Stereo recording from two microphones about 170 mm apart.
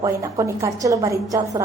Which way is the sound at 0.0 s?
15° right (ahead or behind).